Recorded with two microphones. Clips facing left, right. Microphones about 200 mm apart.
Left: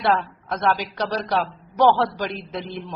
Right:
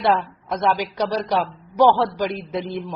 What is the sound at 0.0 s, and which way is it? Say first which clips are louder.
Speech: right 2 dB; 10° right (ahead or behind).